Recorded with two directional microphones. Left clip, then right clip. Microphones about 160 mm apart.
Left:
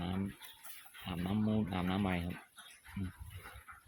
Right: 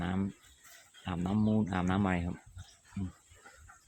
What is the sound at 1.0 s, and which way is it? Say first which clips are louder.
Speech: right 4 dB; 20° right (ahead or behind).